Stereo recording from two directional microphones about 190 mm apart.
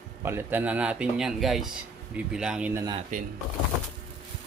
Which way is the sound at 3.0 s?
40° right (ahead or behind).